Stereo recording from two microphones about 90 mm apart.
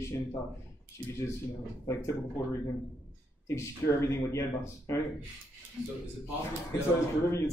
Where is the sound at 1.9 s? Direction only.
30° left (ahead or behind).